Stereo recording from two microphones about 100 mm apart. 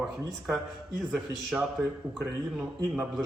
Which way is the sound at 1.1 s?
5° right (ahead or behind).